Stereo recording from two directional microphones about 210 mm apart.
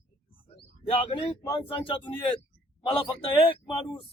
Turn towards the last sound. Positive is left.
turn(degrees=25)  # may be behind; listen again after turning